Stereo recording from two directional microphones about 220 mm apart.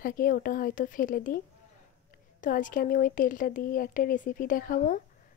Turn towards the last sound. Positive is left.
turn(degrees=40)  # may be behind; listen again after turning